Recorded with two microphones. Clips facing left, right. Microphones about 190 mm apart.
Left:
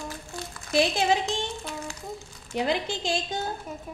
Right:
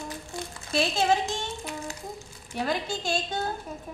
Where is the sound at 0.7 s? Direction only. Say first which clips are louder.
Left 2 dB; 15° left (ahead or behind).